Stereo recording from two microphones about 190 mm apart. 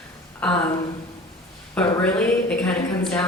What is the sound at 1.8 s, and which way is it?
A man's voice, 5° left (ahead or behind).